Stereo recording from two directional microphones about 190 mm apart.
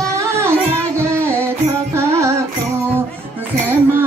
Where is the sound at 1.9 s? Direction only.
15° right (ahead or behind).